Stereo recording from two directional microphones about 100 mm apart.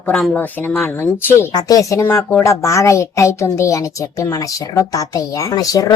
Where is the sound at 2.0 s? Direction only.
25° left (ahead or behind).